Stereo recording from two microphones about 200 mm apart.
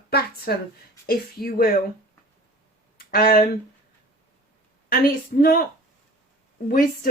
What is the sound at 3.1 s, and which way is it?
Speech, 45° left (ahead or behind).